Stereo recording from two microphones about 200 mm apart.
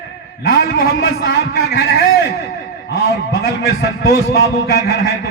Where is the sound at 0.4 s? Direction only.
50° left (ahead or behind).